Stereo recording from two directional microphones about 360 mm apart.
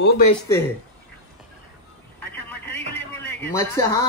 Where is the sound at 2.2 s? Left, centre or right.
Centre.